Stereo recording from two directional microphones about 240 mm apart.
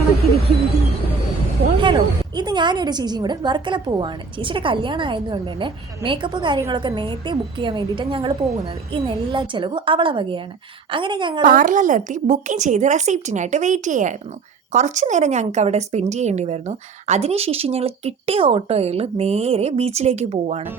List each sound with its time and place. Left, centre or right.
1.8 s a woman's voice: centre
11.4 s a woman's voice: right